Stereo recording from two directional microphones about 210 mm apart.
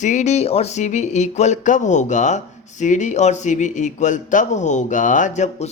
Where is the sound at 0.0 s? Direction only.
35° left (ahead or behind).